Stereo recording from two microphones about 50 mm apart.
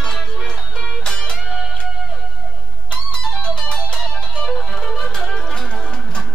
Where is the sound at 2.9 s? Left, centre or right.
Centre.